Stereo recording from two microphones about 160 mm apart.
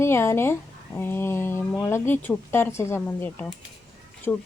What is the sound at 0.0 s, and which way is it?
A woman's voice, 15° left (ahead or behind).